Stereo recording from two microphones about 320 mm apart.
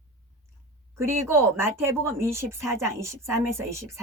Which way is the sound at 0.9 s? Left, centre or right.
Centre.